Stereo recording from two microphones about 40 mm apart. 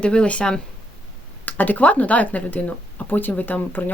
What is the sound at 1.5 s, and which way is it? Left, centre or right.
Speech, left.